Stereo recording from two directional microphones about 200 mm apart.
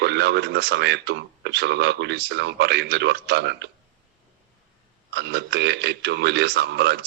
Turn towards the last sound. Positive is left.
turn(degrees=-55)  # may be behind; listen again after turning